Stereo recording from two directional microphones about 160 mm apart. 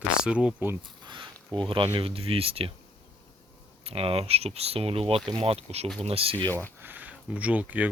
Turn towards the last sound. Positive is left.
turn(degrees=-10)  # may be behind; listen again after turning